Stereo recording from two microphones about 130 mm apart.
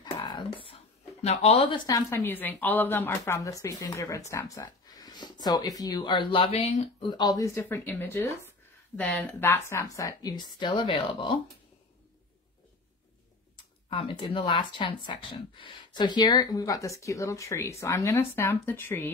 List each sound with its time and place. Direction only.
0.0 s a sound: 35° left (ahead or behind)
1.9 s speech: 25° left (ahead or behind); by 6.9 s 55° left (ahead or behind)
7.0 s speech: 35° left (ahead or behind)
13.8 s speech: 45° left (ahead or behind); by 19.0 s 15° left (ahead or behind)